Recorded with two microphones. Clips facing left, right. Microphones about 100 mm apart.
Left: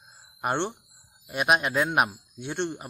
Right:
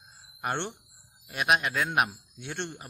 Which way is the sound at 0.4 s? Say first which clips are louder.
Left 4 dB; 20° left (ahead or behind).